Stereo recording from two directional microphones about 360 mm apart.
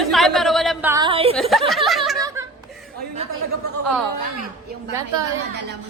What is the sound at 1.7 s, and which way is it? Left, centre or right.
Chuckle, centre.